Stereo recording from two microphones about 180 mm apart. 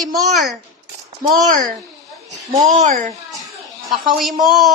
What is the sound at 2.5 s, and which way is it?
Speech, 45° right (ahead or behind).